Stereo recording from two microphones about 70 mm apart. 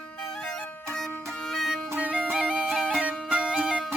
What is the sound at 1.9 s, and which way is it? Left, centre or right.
Music, centre.